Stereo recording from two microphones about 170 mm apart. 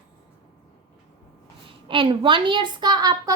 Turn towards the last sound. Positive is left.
turn(degrees=-25)  # may be behind; listen again after turning